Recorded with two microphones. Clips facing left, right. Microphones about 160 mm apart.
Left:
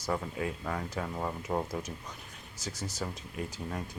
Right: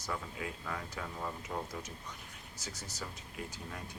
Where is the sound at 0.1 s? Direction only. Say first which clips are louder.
Left 7 dB; 45° left (ahead or behind).